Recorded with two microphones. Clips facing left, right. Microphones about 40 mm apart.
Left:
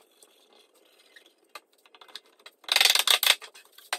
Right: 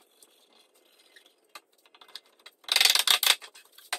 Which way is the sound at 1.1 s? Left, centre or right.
Centre.